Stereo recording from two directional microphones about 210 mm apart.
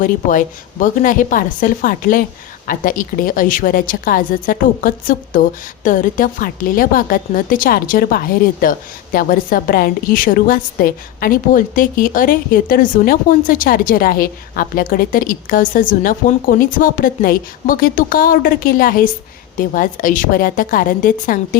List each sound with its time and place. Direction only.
0.0 s a woman's voice: 40° left (ahead or behind)